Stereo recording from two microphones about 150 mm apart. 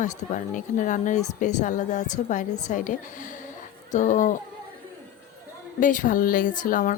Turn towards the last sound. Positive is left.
turn(degrees=60)  # may be behind; listen again after turning